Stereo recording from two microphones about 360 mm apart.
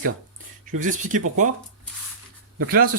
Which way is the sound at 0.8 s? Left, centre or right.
Right.